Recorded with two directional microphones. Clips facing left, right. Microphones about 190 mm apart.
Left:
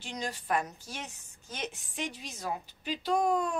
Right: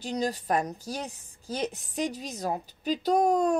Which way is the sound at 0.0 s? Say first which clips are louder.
Right 8 dB; 35° right (ahead or behind).